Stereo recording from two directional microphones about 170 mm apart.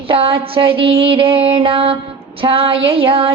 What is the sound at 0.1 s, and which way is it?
Mantra, 35° right (ahead or behind).